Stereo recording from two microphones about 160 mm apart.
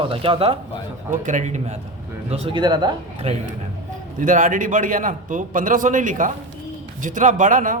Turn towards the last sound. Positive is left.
turn(degrees=-55)  # may be behind; listen again after turning